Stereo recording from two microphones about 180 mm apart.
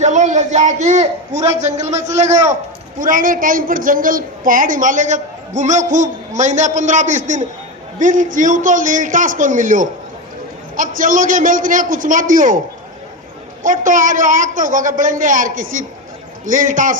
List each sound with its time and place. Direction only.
0.0 s a man's voice: 40° right (ahead or behind)
13.6 s a woman's voice: 45° right (ahead or behind)